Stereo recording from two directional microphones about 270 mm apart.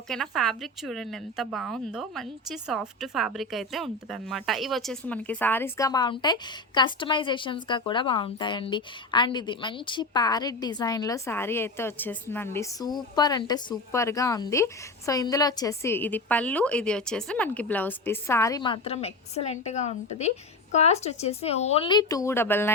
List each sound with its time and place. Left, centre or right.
0.1 s speech: centre